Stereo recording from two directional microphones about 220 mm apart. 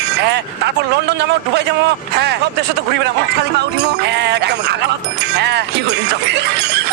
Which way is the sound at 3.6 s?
50° right (ahead or behind).